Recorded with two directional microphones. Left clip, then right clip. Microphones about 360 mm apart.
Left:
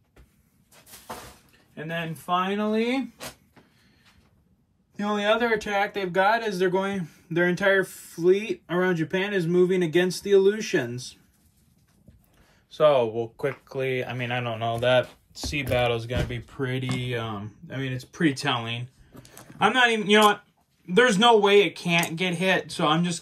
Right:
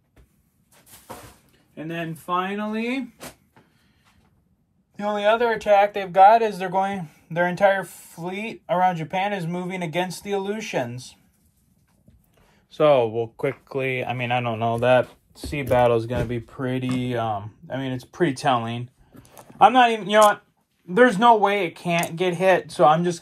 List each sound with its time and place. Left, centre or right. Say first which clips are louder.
1.8 s speech: right 1 dB; centre
2.6 s speech: left 2 dB; centre
4.9 s speech: right 3 dB; centre
12.7 s speech: right 2 dB; centre
15.0 s speech: left 1 dB; centre
19.6 s speech: right 5 dB; centre